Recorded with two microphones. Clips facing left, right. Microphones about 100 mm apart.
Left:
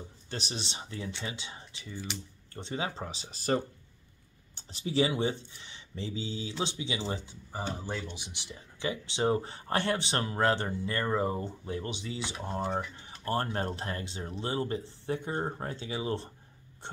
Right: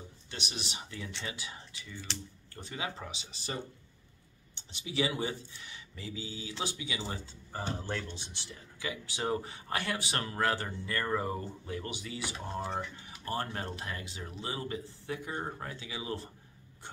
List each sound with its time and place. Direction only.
0.3 s speech: 35° left (ahead or behind)
13.2 s speech: 35° left (ahead or behind)